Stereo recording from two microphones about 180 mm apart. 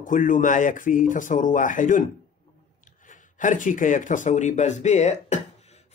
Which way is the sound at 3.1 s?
45° left (ahead or behind).